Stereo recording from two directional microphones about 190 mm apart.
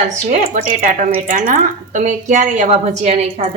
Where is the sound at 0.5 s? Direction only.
45° right (ahead or behind).